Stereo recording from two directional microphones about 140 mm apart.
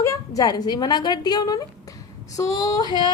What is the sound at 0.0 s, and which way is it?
A woman's voice, 25° left (ahead or behind).